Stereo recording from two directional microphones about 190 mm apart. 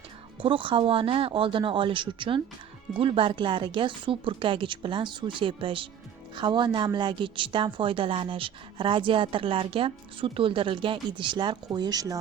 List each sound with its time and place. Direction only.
0.4 s a woman's voice: 25° right (ahead or behind)